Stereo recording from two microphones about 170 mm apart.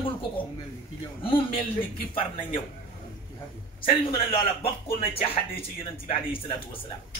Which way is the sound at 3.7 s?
30° left (ahead or behind).